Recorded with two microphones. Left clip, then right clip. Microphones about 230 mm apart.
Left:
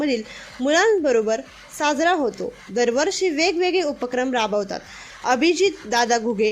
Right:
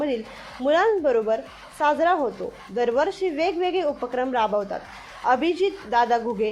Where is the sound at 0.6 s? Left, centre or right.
Left.